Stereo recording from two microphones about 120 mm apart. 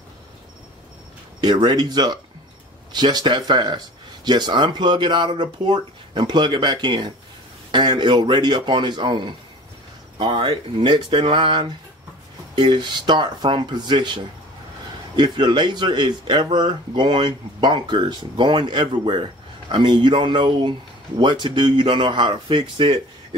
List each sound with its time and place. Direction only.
1.4 s speech: 35° right (ahead or behind)